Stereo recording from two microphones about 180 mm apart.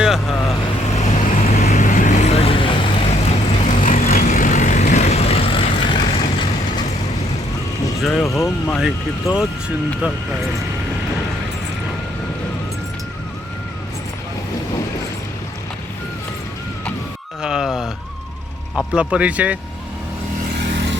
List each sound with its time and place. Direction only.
0.0 s vehicle: centre (ahead or behind)
0.9 s vehicle: 40° left (ahead or behind)
8.4 s speech: 5° left (ahead or behind)
17.4 s a sound: 5° right (ahead or behind)
18.8 s speech: 5° right (ahead or behind)